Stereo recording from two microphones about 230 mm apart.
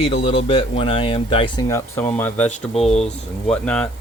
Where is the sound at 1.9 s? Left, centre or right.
Centre.